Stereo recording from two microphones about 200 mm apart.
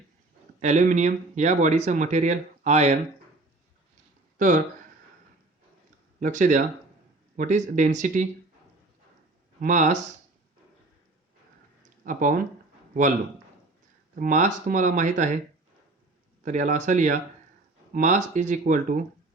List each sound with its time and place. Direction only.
0.6 s speech: 35° right (ahead or behind)
4.4 s speech: 40° right (ahead or behind)
6.1 s speech: 40° right (ahead or behind)
9.6 s speech: 40° right (ahead or behind)
12.0 s speech: 40° right (ahead or behind)
14.2 s speech: 40° right (ahead or behind)
16.4 s speech: 40° right (ahead or behind)